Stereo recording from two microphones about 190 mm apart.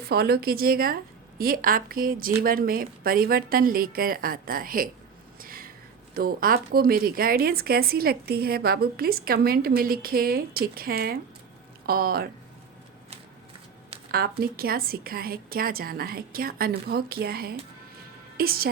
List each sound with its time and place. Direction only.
0.0 s speech: 55° right (ahead or behind)
5.4 s a sound: 50° right (ahead or behind)
6.1 s speech: 50° right (ahead or behind)
14.1 s speech: 55° right (ahead or behind)